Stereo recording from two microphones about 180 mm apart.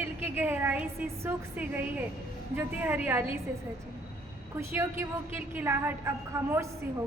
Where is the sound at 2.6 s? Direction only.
10° right (ahead or behind).